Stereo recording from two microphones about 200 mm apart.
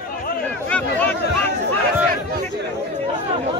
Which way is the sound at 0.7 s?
10° left (ahead or behind).